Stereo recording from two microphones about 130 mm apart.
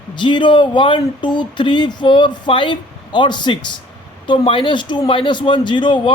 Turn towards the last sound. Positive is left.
turn(degrees=40)  # may be behind; listen again after turning